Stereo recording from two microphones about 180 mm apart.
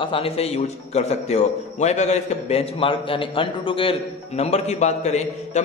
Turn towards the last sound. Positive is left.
turn(degrees=40)  # may be behind; listen again after turning